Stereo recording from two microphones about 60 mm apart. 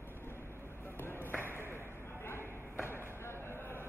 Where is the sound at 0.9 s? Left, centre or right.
Left.